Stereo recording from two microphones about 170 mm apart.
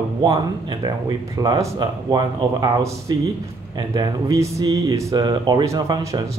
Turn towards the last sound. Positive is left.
turn(degrees=-20)  # may be behind; listen again after turning